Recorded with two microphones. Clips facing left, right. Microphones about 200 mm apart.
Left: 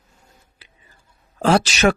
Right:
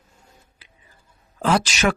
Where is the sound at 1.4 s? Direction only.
30° left (ahead or behind).